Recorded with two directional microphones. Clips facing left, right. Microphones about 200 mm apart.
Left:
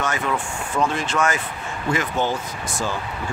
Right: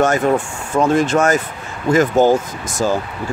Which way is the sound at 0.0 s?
45° right (ahead or behind).